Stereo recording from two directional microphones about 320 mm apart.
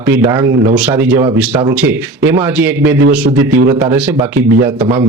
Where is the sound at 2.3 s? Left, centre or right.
Centre.